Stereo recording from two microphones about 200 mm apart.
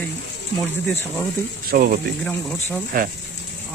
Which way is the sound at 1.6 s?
45° right (ahead or behind).